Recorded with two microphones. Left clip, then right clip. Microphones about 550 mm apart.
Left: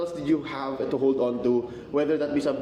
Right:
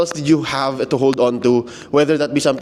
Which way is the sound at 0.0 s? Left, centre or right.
Right.